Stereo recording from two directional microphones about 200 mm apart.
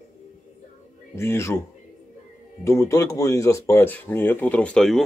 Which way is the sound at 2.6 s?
15° left (ahead or behind).